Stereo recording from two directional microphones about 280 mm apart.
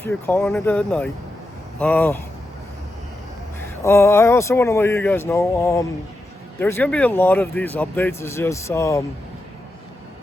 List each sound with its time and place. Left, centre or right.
0.0 s speech: centre
3.6 s speech: centre